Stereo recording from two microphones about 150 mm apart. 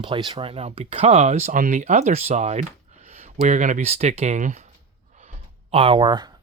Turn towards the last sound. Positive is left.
turn(degrees=-25)  # may be behind; listen again after turning